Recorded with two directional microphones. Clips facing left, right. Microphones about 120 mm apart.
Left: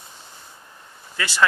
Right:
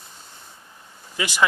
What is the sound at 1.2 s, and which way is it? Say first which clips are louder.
Speech: even; 15° right (ahead or behind).